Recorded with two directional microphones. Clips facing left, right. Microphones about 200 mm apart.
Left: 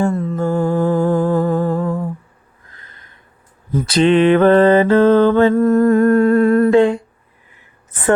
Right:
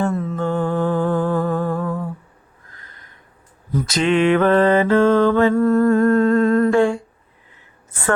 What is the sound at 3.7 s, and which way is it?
Mantra, 25° left (ahead or behind).